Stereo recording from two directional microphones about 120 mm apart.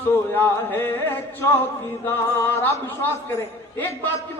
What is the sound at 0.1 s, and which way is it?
A man's voice, 15° left (ahead or behind).